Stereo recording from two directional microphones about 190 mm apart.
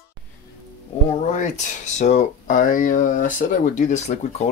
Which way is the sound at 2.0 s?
40° left (ahead or behind).